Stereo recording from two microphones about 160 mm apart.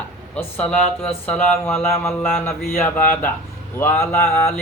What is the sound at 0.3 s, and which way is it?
Mantra, 10° left (ahead or behind).